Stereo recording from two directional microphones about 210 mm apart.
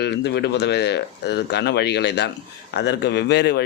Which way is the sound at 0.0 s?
50° left (ahead or behind).